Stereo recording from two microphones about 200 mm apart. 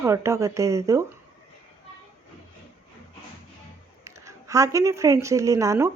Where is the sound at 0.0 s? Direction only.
15° right (ahead or behind).